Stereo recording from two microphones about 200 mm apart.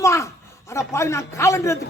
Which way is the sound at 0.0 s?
15° left (ahead or behind).